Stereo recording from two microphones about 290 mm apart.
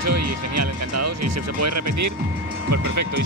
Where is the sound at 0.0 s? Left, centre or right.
Right.